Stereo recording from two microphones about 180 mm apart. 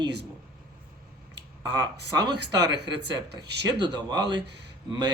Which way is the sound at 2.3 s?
70° right (ahead or behind).